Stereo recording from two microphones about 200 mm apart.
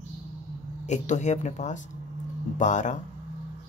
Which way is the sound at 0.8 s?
35° left (ahead or behind).